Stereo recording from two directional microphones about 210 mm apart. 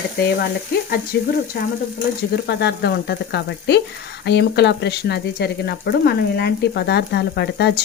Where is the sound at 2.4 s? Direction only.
50° left (ahead or behind).